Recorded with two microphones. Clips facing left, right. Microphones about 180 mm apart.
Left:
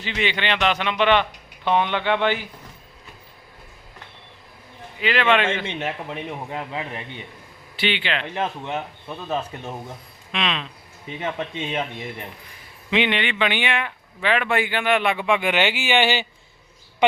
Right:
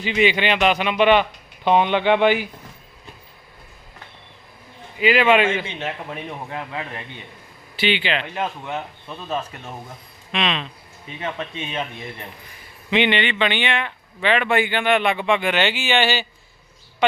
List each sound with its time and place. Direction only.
0.0 s a man's voice: 15° right (ahead or behind)
4.9 s a man's voice: 10° right (ahead or behind)
5.8 s speech: 15° left (ahead or behind)
7.8 s speech: centre (ahead or behind)
8.4 s speech: 20° left (ahead or behind)
10.3 s speech: centre (ahead or behind)
11.0 s speech: 20° left (ahead or behind)
12.9 s a woman's voice: centre (ahead or behind); by 17.2 s 15° left (ahead or behind)